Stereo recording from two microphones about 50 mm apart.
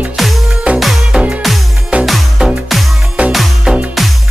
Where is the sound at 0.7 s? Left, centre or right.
Right.